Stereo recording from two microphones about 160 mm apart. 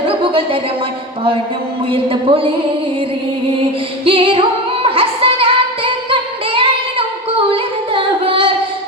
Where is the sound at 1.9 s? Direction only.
35° right (ahead or behind).